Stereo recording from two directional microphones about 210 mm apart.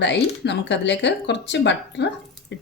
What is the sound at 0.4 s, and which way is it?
Speech, 55° left (ahead or behind).